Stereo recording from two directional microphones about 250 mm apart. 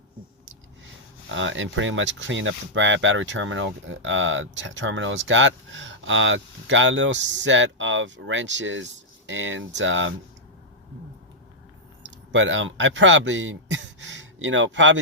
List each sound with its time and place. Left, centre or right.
1.3 s speech: right
12.3 s speech: right